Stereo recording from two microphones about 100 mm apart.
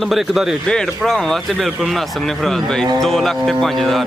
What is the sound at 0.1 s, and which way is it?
Speech, 5° right (ahead or behind).